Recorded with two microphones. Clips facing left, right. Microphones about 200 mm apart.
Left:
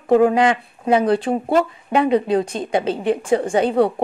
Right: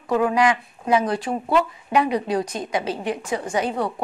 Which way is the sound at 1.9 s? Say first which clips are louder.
Left 4 dB; 30° left (ahead or behind).